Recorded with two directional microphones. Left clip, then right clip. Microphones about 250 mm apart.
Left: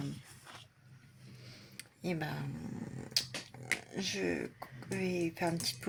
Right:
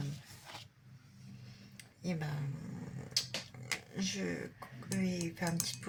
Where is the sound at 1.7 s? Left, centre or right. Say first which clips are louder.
Left 4 dB; left.